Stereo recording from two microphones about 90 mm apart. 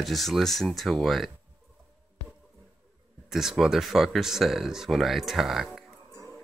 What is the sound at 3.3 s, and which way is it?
Speech, 5° right (ahead or behind).